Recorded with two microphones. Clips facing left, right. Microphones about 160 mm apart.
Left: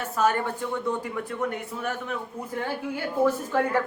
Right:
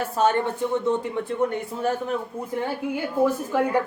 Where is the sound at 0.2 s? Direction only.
25° right (ahead or behind).